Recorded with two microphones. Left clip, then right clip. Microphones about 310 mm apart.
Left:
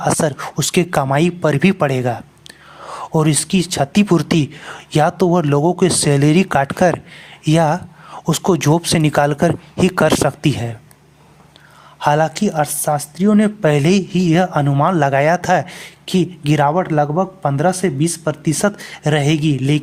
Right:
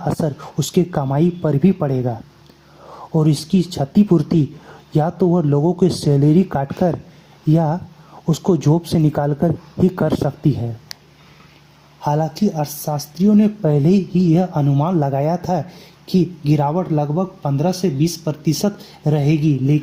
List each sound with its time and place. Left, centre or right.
0.0 s speech: left
2.8 s a sound: left
3.7 s speech: left
11.9 s speech: left
13.9 s speech: left
14.3 s speech: left
16.0 s speech: left
16.6 s speech: left
17.7 s speech: left
18.9 s speech: left
19.3 s speech: left